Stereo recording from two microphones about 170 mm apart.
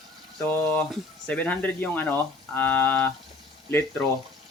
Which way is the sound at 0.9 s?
5° left (ahead or behind).